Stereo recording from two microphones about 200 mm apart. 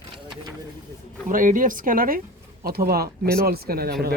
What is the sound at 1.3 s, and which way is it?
Speech, 40° right (ahead or behind).